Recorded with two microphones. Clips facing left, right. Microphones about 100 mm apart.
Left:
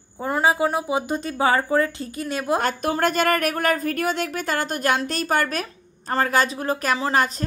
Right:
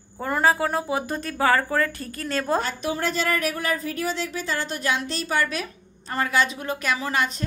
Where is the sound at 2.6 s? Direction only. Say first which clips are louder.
Left 5 dB; 50° left (ahead or behind).